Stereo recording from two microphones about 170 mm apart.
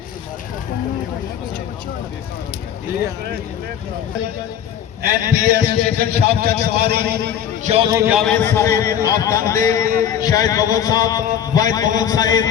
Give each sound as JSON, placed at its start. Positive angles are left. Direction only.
{"t": 5.2, "sound": "a man's voice", "side_deg": -65}
{"t": 7.6, "sound": "a man's voice", "side_deg": -40}
{"t": 7.9, "sound": "a man's voice", "side_deg": -15}
{"t": 8.1, "sound": "a man's voice", "side_deg": 0}
{"t": 8.4, "sound": "a man's voice", "side_deg": 15}